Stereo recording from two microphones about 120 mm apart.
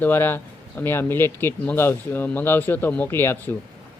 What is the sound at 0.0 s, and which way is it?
Speech, 20° left (ahead or behind).